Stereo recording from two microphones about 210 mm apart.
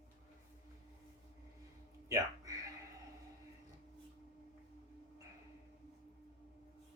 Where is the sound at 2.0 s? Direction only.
15° right (ahead or behind).